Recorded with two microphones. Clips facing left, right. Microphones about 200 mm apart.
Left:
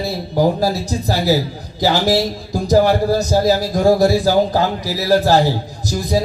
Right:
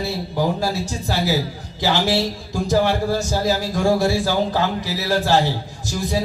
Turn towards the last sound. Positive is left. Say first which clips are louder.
# left 4 dB
turn(degrees=40)  # may be behind; listen again after turning